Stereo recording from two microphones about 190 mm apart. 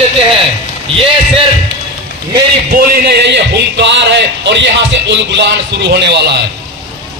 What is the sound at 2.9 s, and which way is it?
A man's voice, 60° right (ahead or behind).